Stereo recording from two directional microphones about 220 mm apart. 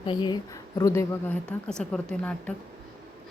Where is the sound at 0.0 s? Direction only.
20° left (ahead or behind); by 2.3 s 5° left (ahead or behind).